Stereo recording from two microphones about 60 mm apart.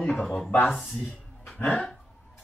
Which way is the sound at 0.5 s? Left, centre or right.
Left.